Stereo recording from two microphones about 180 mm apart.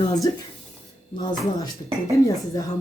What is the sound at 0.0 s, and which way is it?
Speech, 20° left (ahead or behind).